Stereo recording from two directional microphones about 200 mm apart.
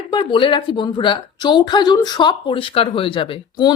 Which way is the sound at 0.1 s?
25° left (ahead or behind).